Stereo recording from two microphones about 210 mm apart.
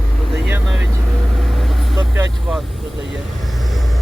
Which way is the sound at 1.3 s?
Centre (ahead or behind).